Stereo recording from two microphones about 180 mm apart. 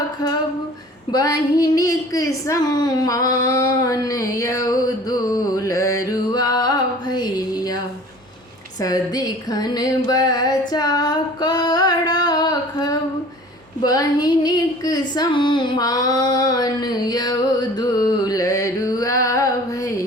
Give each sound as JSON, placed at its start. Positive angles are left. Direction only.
{"t": 1.1, "sound": "a woman's voice", "side_deg": 20}
{"t": 8.8, "sound": "a sound", "side_deg": 20}
{"t": 10.7, "sound": "female singing", "side_deg": 20}